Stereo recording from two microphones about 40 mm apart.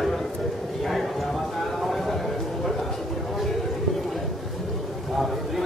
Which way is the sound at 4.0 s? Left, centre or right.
Centre.